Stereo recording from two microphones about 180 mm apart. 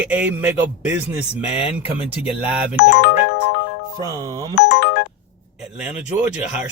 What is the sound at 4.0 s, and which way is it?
Speech, 15° right (ahead or behind).